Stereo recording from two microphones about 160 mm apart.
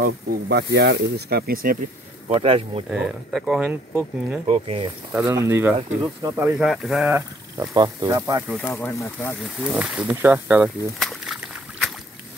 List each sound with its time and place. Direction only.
0.0 s speech: 90° right; by 1.8 s 65° right (ahead or behind)
2.2 s speech: 35° right (ahead or behind)
2.9 s speech: 5° right (ahead or behind)
4.5 s speech: 40° right (ahead or behind)
5.1 s speech: 20° right (ahead or behind)
6.6 s speech: centre (ahead or behind)
7.1 s speech: 15° right (ahead or behind)
8.5 s speech: 10° left (ahead or behind)
9.8 s speech: 10° right (ahead or behind)
11.0 s a sound: centre (ahead or behind)